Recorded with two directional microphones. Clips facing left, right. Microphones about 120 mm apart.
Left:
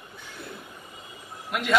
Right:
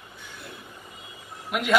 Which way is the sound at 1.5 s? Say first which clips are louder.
Right 2 dB; centre (ahead or behind).